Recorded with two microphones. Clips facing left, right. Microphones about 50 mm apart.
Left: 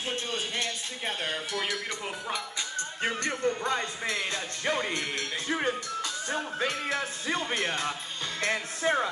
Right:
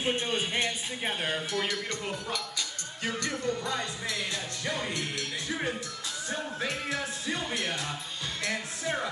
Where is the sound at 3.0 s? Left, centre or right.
Left.